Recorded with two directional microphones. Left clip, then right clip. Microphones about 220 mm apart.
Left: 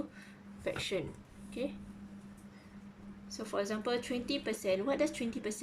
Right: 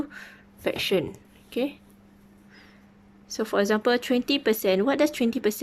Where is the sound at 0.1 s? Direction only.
45° right (ahead or behind).